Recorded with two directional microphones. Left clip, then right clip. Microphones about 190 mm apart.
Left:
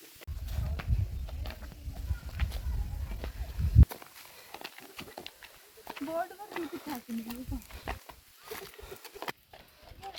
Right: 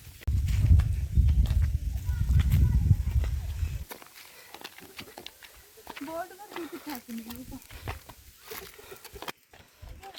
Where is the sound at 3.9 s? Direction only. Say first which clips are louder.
Right 1 dB; 10° left (ahead or behind).